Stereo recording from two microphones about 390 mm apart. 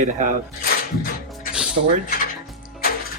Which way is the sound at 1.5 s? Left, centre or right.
Centre.